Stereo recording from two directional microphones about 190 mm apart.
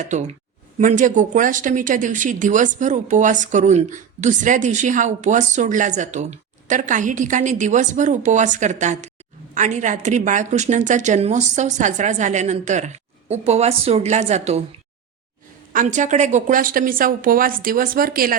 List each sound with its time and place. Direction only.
0.0 s speech: 40° right (ahead or behind)
15.7 s a woman's voice: 40° right (ahead or behind)